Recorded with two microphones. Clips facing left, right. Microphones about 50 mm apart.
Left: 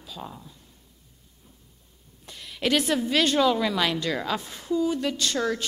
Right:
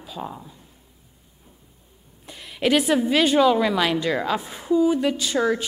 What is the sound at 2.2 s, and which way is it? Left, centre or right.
A woman's voice, centre.